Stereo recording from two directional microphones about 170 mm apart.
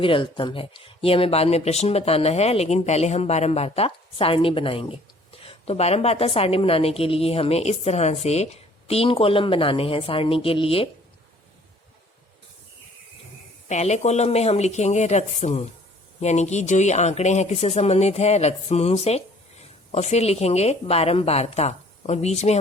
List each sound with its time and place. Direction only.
0.0 s speech: 30° left (ahead or behind)
13.7 s speech: 40° left (ahead or behind)